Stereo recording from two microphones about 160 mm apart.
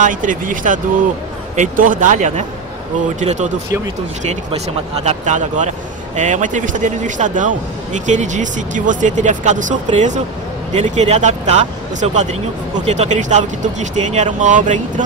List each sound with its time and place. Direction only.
0.0 s speech: 55° right (ahead or behind)